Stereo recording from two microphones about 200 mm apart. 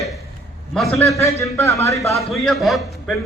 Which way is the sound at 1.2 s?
15° left (ahead or behind).